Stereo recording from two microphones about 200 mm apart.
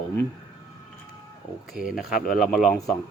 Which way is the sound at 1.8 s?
Centre (ahead or behind).